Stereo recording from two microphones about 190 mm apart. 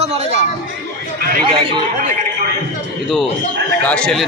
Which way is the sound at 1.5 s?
25° right (ahead or behind).